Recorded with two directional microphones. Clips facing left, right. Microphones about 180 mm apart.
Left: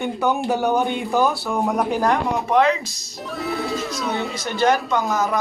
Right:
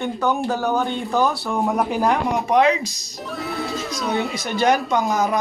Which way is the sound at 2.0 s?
15° right (ahead or behind).